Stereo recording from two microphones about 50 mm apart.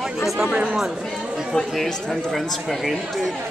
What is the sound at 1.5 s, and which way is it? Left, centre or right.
Speech, centre.